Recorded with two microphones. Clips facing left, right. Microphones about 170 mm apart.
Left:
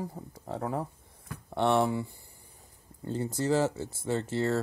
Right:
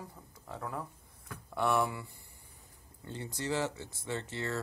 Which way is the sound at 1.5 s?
25° left (ahead or behind).